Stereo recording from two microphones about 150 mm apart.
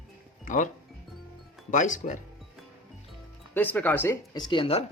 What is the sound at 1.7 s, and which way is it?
Speech, 55° left (ahead or behind).